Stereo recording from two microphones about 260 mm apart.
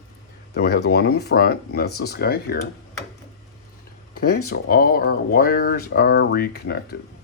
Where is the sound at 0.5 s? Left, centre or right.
Left.